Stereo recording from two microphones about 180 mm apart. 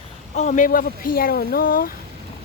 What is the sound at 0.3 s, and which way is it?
Speech, 45° left (ahead or behind).